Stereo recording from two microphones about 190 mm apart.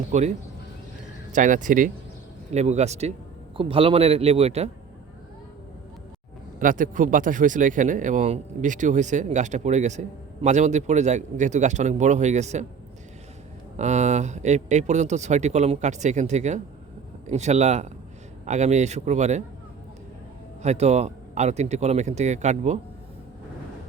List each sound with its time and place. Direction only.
0.1 s speech: 35° right (ahead or behind)
6.6 s speech: 45° right (ahead or behind)
13.7 s speech: 35° right (ahead or behind)
20.6 s speech: 35° right (ahead or behind)